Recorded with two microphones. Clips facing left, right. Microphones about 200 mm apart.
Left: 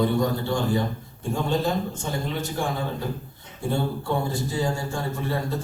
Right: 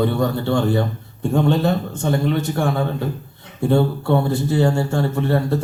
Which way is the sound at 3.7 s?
65° right (ahead or behind).